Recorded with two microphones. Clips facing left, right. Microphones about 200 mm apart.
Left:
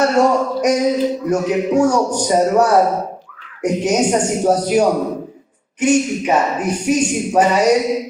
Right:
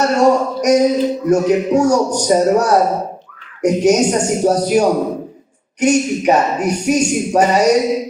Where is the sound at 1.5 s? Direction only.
40° right (ahead or behind).